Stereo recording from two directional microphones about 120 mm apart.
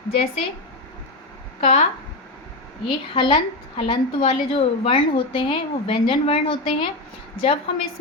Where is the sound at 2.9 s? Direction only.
40° left (ahead or behind).